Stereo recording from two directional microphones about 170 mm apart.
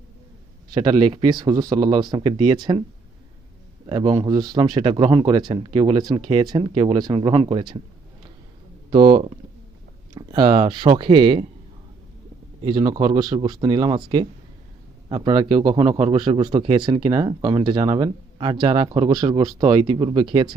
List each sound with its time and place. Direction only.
0.7 s speech: 25° right (ahead or behind)
3.8 s speech: 30° right (ahead or behind)
8.9 s speech: 30° right (ahead or behind)
12.6 s speech: 25° right (ahead or behind)